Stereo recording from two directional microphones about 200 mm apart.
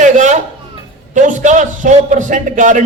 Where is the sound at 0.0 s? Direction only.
35° right (ahead or behind).